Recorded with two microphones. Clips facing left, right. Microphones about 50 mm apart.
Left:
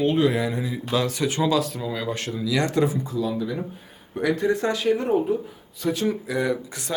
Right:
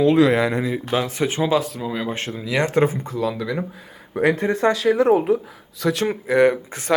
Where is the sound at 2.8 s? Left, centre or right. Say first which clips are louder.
Right 3 dB; right.